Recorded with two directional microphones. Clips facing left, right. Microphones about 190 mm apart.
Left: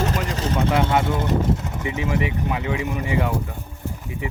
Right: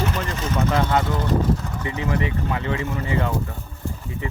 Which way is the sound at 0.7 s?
15° left (ahead or behind).